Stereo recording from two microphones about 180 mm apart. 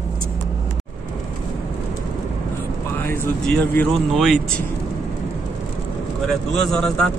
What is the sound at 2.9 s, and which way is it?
A man's voice, 10° left (ahead or behind).